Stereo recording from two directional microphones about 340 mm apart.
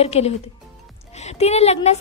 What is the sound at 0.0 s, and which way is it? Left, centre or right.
A woman's voice, centre.